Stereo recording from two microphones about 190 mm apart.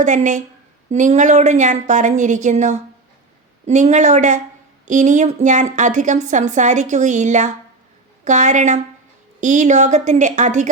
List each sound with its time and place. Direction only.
0.0 s a woman's voice: 40° right (ahead or behind)